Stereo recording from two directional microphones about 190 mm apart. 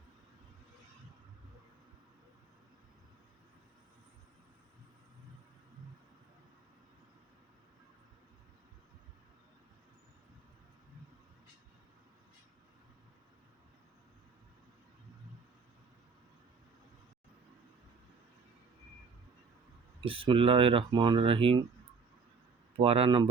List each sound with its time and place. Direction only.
20.1 s speech: 30° right (ahead or behind)
22.8 s speech: 30° right (ahead or behind)